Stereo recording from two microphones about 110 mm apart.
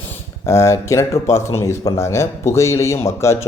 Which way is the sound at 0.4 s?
25° left (ahead or behind).